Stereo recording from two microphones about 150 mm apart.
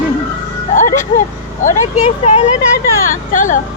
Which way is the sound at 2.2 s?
45° left (ahead or behind).